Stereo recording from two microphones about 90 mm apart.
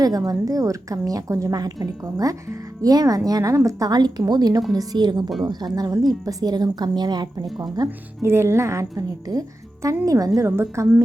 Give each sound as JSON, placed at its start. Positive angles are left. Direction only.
{"t": 0.3, "sound": "a woman's voice", "side_deg": -40}
{"t": 7.4, "sound": "speech", "side_deg": 0}
{"t": 7.9, "sound": "a woman's voice", "side_deg": -30}
{"t": 10.4, "sound": "a woman's voice", "side_deg": -30}